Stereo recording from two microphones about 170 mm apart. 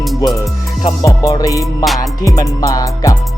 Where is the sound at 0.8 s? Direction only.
20° left (ahead or behind).